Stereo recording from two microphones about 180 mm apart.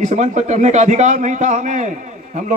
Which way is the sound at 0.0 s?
40° right (ahead or behind).